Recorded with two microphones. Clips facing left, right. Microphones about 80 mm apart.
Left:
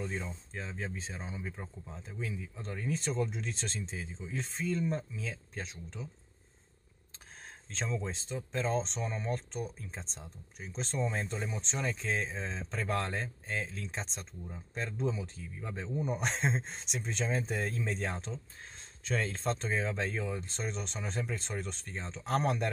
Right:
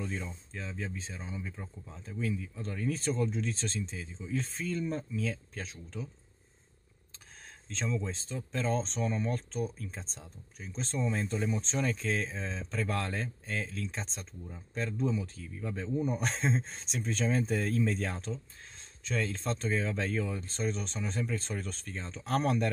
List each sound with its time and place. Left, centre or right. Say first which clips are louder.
0.0 s speech: even; left
2.5 s speech: right 2 dB; centre
7.7 s speech: right 2 dB; left
11.2 s speech: right 5 dB; centre
12.4 s speech: right 2 dB; left
14.1 s speech: even; centre
14.8 s speech: right 3 dB; left
19.0 s speech: even; left; by 20.7 s centre
20.7 s speech: right 2 dB; left